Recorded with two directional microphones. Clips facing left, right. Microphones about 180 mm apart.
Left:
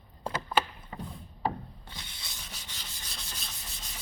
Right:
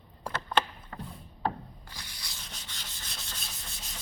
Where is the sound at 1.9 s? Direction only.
25° left (ahead or behind).